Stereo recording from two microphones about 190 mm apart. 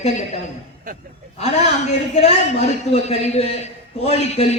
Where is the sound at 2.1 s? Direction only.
35° left (ahead or behind).